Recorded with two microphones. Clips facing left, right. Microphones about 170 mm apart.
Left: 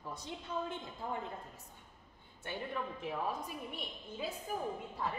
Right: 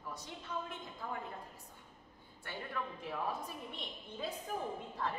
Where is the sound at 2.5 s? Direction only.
20° left (ahead or behind).